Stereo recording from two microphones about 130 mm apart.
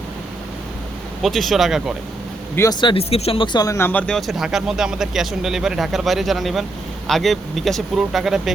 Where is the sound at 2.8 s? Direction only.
45° left (ahead or behind).